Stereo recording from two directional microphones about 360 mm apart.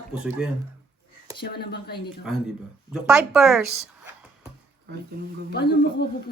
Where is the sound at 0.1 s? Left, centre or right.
Centre.